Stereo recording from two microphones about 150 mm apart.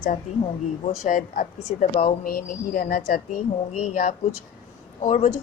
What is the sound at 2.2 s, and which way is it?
Speech, 75° left (ahead or behind).